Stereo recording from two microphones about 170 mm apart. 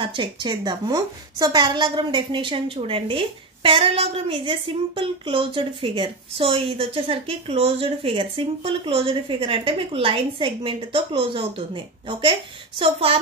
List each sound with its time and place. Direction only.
0.0 s a woman's voice: 30° right (ahead or behind)